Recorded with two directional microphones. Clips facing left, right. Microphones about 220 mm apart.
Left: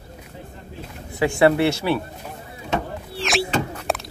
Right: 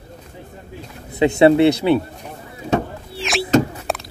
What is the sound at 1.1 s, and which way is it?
Speech, 20° right (ahead or behind).